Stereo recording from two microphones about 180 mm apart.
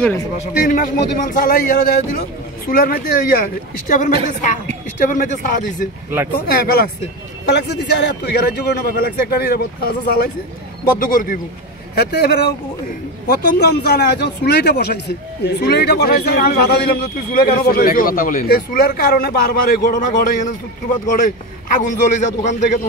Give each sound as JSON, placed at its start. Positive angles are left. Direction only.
{"t": 0.6, "sound": "a man's voice", "side_deg": 50}
{"t": 7.4, "sound": "a man's voice", "side_deg": 70}
{"t": 11.0, "sound": "a man's voice", "side_deg": 50}
{"t": 11.9, "sound": "a man's voice", "side_deg": 65}
{"t": 21.7, "sound": "a man's voice", "side_deg": 40}